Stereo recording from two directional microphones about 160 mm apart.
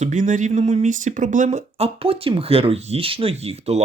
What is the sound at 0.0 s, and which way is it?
Speech, 50° right (ahead or behind).